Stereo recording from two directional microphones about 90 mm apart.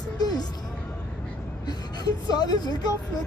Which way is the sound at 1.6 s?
50° left (ahead or behind).